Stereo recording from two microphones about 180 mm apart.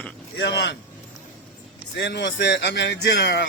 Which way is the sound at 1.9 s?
75° left (ahead or behind).